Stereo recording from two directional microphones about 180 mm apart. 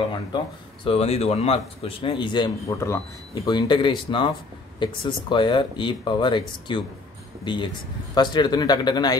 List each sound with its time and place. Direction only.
0.8 s speech: 35° left (ahead or behind)